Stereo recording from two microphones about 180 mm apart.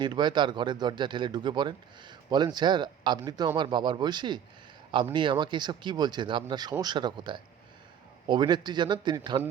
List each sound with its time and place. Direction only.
0.0 s speech: 25° right (ahead or behind)